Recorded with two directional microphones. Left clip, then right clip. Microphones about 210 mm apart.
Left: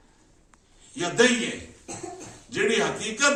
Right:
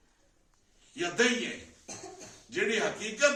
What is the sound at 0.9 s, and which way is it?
Speech, 5° right (ahead or behind).